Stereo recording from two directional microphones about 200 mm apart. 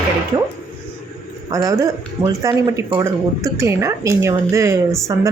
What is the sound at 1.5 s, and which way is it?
Speech, 15° right (ahead or behind).